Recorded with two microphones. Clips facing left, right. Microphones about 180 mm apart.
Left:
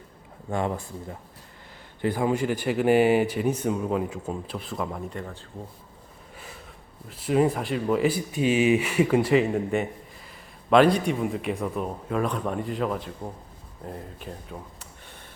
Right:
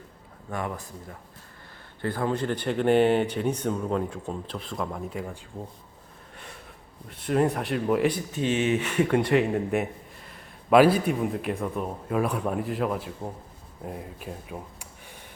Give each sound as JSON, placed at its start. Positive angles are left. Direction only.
{"t": 0.5, "sound": "speech", "side_deg": 25}
{"t": 2.0, "sound": "speech", "side_deg": 15}
{"t": 7.1, "sound": "speech", "side_deg": 5}